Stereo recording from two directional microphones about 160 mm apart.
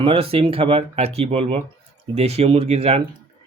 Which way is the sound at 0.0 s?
35° right (ahead or behind).